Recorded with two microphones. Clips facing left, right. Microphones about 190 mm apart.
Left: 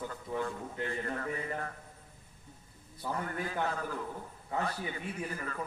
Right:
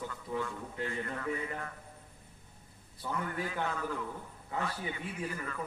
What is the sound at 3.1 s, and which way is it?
A man's voice, 35° left (ahead or behind).